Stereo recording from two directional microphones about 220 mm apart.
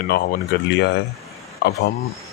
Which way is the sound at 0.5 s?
45° left (ahead or behind).